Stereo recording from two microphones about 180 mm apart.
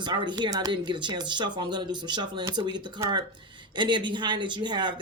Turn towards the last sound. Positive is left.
turn(degrees=-25)  # may be behind; listen again after turning